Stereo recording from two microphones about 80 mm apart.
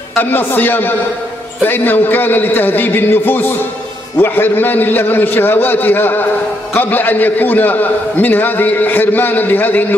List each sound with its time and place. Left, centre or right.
0.2 s a man's voice: left